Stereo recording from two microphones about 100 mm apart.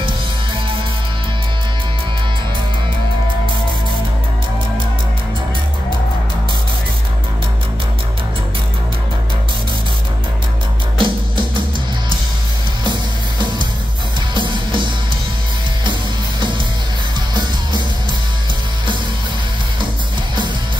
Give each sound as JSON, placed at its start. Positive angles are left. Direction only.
{"t": 11.0, "sound": "music", "side_deg": -55}
{"t": 14.3, "sound": "music", "side_deg": -55}
{"t": 15.8, "sound": "music", "side_deg": -55}